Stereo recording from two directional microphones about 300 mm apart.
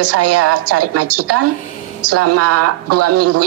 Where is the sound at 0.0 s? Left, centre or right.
Right.